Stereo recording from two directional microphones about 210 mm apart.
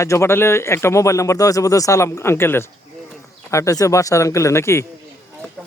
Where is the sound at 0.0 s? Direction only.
15° left (ahead or behind).